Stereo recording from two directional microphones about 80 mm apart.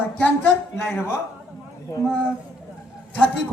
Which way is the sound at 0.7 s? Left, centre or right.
Left.